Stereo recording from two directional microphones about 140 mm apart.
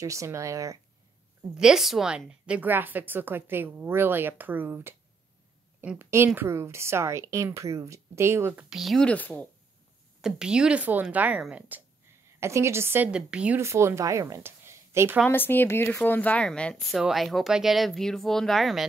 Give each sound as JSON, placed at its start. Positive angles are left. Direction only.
{"t": 0.0, "sound": "a woman's voice", "side_deg": -20}
{"t": 1.6, "sound": "a woman's voice", "side_deg": -5}
{"t": 8.6, "sound": "speech", "side_deg": 0}
{"t": 10.2, "sound": "a woman's voice", "side_deg": -5}
{"t": 12.4, "sound": "a woman's voice", "side_deg": -20}
{"t": 13.6, "sound": "a woman's voice", "side_deg": -20}
{"t": 15.2, "sound": "speech", "side_deg": 15}